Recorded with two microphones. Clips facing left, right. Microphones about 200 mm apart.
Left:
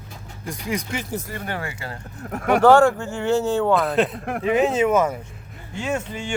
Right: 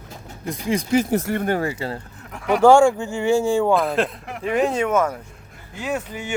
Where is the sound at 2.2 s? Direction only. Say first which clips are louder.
Left 2 dB; 45° left (ahead or behind).